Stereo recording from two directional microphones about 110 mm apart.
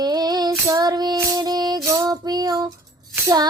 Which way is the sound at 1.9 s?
35° right (ahead or behind).